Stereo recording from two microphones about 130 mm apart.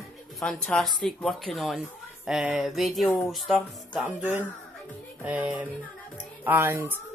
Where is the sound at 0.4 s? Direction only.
5° left (ahead or behind).